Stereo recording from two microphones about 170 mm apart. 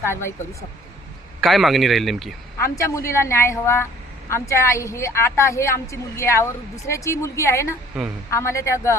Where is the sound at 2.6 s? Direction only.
15° left (ahead or behind).